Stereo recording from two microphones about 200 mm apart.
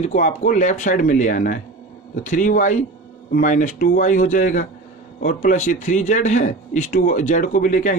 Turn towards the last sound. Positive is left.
turn(degrees=40)  # may be behind; listen again after turning